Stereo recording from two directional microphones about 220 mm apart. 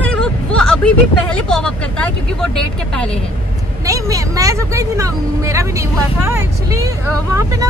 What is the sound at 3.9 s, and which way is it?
Speech, 15° right (ahead or behind).